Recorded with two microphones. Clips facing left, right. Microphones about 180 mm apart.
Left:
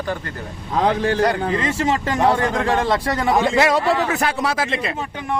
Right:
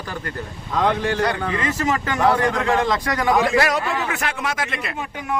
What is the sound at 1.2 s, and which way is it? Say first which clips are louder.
A man's voice: left 3 dB; 35° left (ahead or behind).